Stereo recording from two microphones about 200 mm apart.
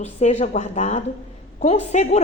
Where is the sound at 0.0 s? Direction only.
35° left (ahead or behind).